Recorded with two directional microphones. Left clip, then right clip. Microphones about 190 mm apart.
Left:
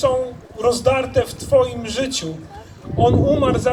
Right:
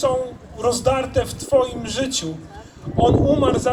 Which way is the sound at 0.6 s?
10° left (ahead or behind).